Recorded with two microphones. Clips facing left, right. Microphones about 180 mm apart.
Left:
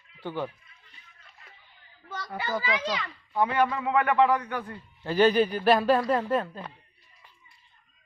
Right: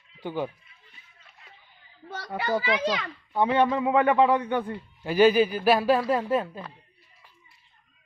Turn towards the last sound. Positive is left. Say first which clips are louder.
# right 1 dB
turn(degrees=-10)  # may be behind; listen again after turning